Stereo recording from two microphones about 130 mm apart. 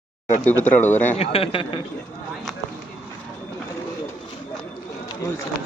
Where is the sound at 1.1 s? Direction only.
50° left (ahead or behind).